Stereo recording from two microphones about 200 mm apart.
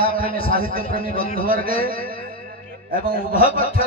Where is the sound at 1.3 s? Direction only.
45° right (ahead or behind).